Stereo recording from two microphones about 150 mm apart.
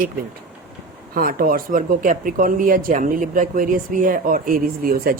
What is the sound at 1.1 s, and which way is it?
Speech, 75° right (ahead or behind).